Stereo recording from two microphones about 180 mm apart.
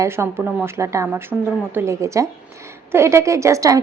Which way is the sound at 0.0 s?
15° right (ahead or behind).